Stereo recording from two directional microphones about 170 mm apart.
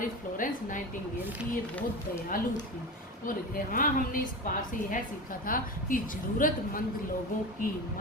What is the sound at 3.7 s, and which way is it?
A woman's voice, 55° left (ahead or behind).